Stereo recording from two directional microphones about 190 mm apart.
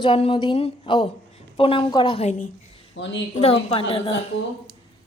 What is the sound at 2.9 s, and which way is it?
Speech, 75° left (ahead or behind).